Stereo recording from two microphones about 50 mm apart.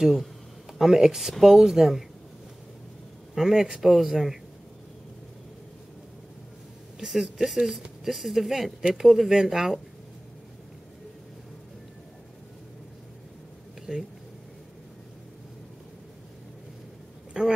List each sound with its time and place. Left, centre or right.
0.0 s speech: centre
3.3 s speech: centre
7.0 s speech: centre
13.9 s speech: centre
17.3 s a woman's voice: centre